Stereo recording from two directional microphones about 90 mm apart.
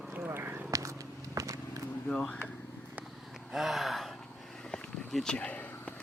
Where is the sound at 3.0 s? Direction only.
Centre (ahead or behind).